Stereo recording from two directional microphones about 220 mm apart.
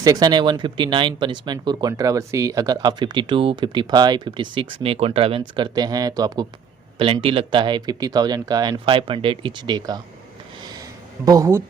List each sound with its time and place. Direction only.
0.0 s speech: 15° right (ahead or behind)
10.6 s a sound: 20° right (ahead or behind)
11.3 s speech: 15° right (ahead or behind)